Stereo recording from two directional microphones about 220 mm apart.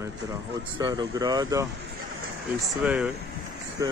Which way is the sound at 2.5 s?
5° right (ahead or behind).